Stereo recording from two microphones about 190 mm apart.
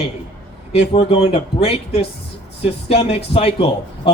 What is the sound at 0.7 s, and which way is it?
A man's voice, 35° left (ahead or behind).